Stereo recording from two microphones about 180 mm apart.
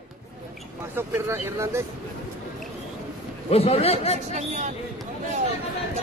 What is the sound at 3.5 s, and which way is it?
Speech, 35° left (ahead or behind).